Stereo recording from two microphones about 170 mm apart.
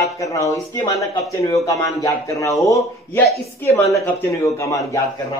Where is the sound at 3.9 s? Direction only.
10° left (ahead or behind).